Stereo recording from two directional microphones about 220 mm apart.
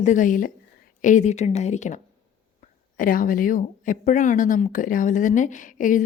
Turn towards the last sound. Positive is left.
turn(degrees=35)  # may be behind; listen again after turning